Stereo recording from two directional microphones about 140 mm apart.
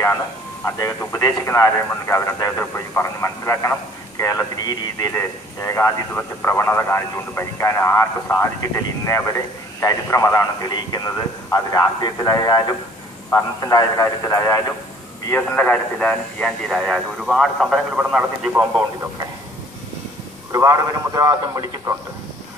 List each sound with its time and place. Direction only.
0.7 s speech: 20° left (ahead or behind); by 18.9 s 10° right (ahead or behind)
20.5 s speech: 25° right (ahead or behind)